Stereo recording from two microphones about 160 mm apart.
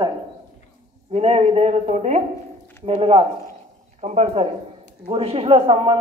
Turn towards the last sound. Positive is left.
turn(degrees=-35)  # may be behind; listen again after turning